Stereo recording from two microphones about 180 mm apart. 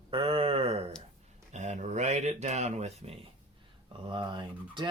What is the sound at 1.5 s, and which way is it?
Speech, 40° right (ahead or behind).